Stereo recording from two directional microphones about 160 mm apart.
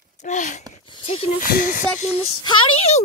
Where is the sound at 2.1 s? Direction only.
35° left (ahead or behind).